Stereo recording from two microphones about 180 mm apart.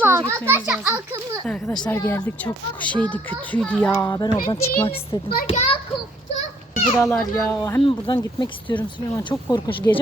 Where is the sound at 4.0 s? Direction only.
20° left (ahead or behind).